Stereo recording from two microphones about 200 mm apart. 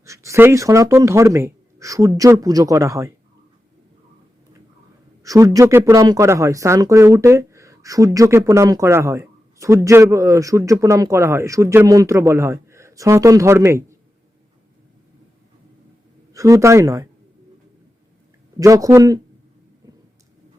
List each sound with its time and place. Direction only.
0.0 s speech: 15° right (ahead or behind)
5.2 s speech: 15° right (ahead or behind)
16.3 s speech: 15° right (ahead or behind)
18.6 s speech: 15° right (ahead or behind)